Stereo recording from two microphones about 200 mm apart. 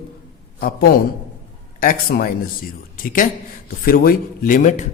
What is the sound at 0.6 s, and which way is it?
A man's voice, 50° left (ahead or behind).